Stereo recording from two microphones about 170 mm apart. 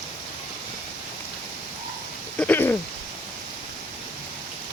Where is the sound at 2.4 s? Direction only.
10° left (ahead or behind).